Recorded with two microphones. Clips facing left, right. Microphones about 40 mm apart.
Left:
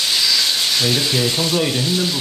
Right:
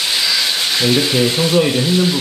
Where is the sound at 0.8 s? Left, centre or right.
Centre.